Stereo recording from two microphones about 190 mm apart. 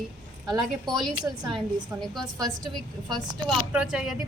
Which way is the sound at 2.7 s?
Centre (ahead or behind).